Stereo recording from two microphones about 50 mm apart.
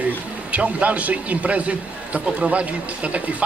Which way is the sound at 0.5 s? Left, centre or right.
Right.